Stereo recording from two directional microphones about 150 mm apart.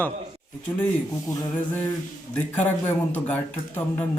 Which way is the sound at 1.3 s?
25° left (ahead or behind).